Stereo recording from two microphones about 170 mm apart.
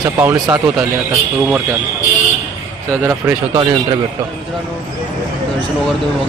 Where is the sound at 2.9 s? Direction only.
20° right (ahead or behind).